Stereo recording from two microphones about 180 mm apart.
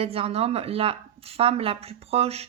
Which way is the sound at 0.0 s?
30° right (ahead or behind).